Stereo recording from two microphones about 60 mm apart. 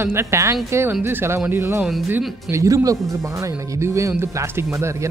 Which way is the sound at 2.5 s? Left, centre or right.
Right.